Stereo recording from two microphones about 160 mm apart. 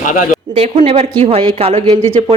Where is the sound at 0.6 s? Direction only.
40° right (ahead or behind).